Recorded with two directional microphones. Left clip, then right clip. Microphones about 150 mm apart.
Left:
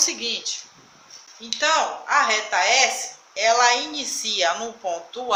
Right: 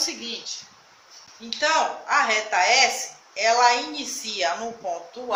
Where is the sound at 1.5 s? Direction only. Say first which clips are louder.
Left 1 dB; 25° left (ahead or behind).